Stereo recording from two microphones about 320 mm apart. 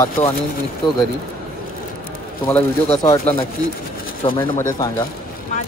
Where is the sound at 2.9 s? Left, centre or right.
Centre.